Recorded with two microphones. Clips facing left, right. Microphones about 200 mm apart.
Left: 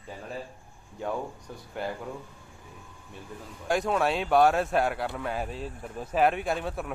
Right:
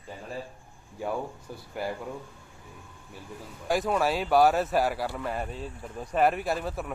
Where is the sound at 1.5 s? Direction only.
10° right (ahead or behind).